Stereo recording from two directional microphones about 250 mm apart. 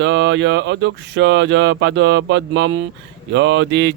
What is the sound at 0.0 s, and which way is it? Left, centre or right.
Speech, right.